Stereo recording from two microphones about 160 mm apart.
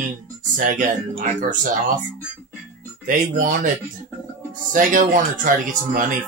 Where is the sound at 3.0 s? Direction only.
55° right (ahead or behind).